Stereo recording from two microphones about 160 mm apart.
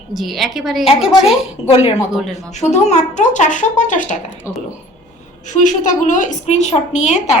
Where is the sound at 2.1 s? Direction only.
Centre (ahead or behind).